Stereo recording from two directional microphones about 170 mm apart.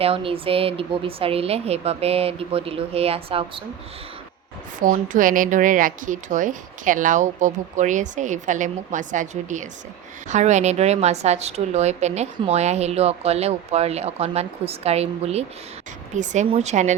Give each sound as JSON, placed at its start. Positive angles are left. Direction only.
{"t": 0.0, "sound": "a woman's voice", "side_deg": -35}
{"t": 4.8, "sound": "a woman's voice", "side_deg": -50}